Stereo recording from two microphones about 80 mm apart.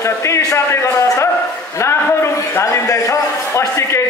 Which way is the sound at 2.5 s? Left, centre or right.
Left.